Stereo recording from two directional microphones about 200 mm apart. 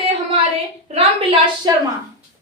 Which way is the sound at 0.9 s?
25° right (ahead or behind).